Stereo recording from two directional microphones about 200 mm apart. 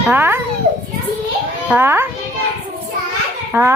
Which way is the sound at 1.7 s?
10° right (ahead or behind).